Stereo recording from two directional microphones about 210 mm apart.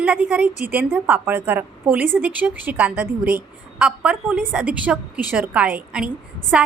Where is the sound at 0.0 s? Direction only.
5° right (ahead or behind).